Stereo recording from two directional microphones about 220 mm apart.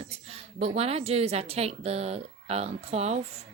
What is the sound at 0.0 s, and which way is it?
A woman's voice, 30° right (ahead or behind).